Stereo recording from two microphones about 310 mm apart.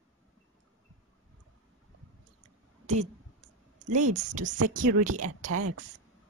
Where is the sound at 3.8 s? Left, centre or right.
Right.